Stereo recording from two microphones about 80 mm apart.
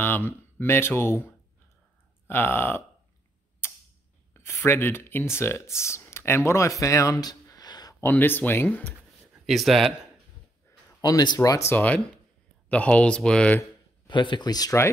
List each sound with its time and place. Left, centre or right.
0.0 s speech: left
3.6 s tick-tock: left
4.3 s speech: left
8.0 s speech: left
9.5 s speech: centre
11.0 s speech: left
11.7 s speech: centre
14.0 s speech: left